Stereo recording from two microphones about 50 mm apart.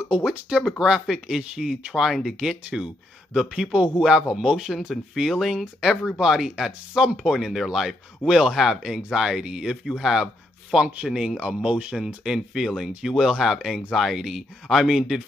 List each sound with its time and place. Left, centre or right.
0.0 s speech: right
1.2 s a man's voice: right; by 10.3 s centre
11.0 s speech: centre